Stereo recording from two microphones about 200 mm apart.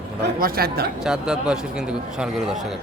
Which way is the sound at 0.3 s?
50° right (ahead or behind).